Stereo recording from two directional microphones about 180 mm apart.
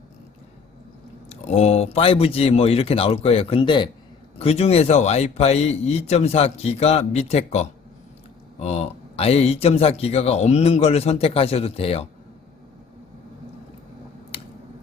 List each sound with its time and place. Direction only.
1.3 s speech: 35° left (ahead or behind)